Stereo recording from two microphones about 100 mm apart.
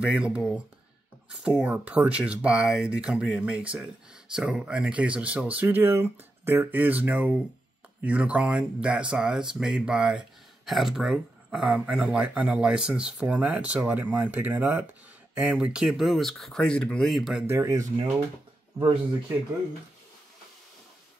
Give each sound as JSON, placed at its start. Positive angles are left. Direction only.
{"t": 0.0, "sound": "speech", "side_deg": -10}
{"t": 17.5, "sound": "speech", "side_deg": -30}